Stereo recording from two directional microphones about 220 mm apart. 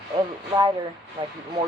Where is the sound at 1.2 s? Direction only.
30° right (ahead or behind).